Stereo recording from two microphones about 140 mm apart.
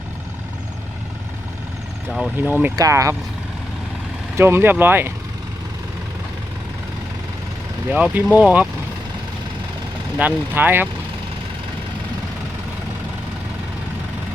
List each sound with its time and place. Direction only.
2.4 s speech: 15° right (ahead or behind)
4.4 s speech: 15° right (ahead or behind)
7.9 s speech: 10° right (ahead or behind)
10.2 s speech: 10° right (ahead or behind)